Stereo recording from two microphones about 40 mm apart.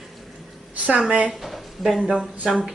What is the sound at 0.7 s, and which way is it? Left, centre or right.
Speech, right.